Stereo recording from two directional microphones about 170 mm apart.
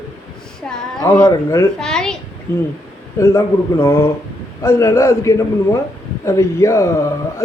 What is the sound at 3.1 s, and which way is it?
A man's voice, 15° left (ahead or behind).